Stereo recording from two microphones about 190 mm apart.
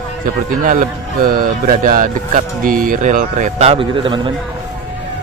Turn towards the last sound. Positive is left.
turn(degrees=-25)  # may be behind; listen again after turning